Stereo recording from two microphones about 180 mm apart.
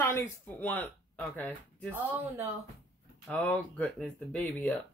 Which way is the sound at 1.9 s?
10° right (ahead or behind).